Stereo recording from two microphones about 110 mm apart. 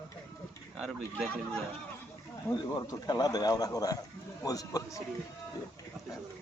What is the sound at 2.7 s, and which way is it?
A man's voice, 40° left (ahead or behind).